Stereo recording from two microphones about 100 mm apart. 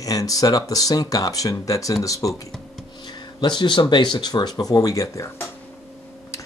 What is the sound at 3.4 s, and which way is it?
Speech, 50° left (ahead or behind).